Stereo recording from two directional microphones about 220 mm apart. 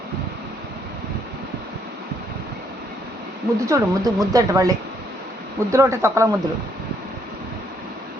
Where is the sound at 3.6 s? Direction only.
15° right (ahead or behind).